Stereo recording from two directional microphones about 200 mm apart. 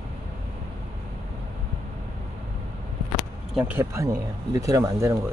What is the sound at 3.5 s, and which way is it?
Speech, 10° right (ahead or behind).